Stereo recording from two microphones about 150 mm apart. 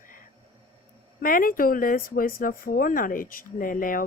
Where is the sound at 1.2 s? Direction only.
70° left (ahead or behind).